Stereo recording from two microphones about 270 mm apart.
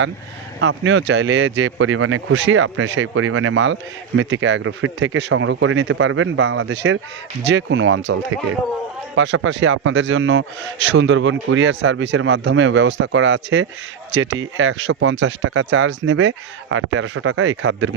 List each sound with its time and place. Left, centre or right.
0.6 s a man's voice: right
9.1 s a man's voice: right